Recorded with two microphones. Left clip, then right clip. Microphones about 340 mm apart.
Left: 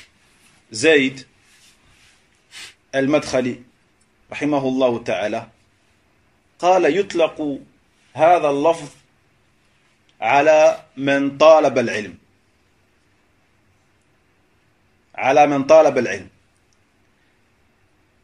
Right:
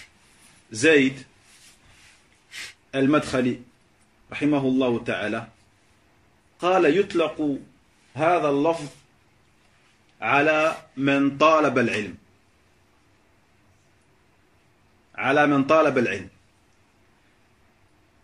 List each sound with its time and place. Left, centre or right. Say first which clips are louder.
0.7 s speech: left 3 dB; centre
2.9 s speech: left 4 dB; centre
6.6 s a man's voice: left 4 dB; centre
10.1 s speech: left 7 dB; centre
15.1 s speech: left 6 dB; centre